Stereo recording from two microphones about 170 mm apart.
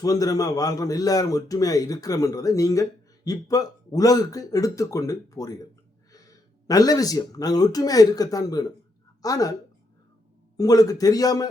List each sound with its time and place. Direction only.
0.0 s a man's voice: 20° left (ahead or behind)
6.7 s a man's voice: 20° left (ahead or behind)
10.6 s a man's voice: 20° left (ahead or behind)